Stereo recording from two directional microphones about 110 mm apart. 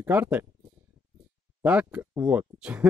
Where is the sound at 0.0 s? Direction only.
15° right (ahead or behind).